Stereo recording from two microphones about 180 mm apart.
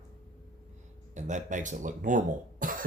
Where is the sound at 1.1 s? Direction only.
40° right (ahead or behind).